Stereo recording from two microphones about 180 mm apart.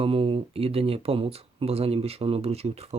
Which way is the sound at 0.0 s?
30° right (ahead or behind).